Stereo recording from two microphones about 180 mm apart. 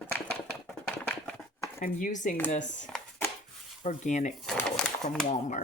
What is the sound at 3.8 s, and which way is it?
Speech, 40° left (ahead or behind).